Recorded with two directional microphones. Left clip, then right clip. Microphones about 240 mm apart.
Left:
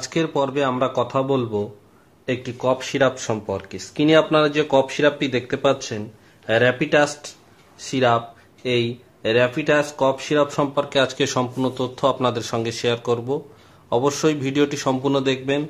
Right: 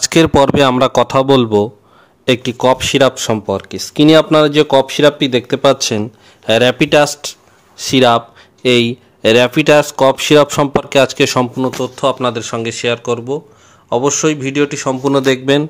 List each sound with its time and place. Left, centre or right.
0.0 s a man's voice: right
11.9 s speech: centre
15.1 s speech: right